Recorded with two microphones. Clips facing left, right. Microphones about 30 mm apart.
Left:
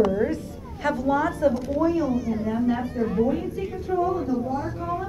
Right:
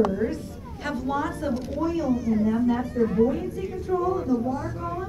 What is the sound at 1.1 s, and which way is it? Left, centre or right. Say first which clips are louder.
Speech: left 7 dB; left.